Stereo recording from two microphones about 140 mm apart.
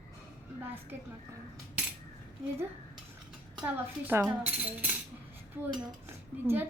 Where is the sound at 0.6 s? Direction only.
15° right (ahead or behind).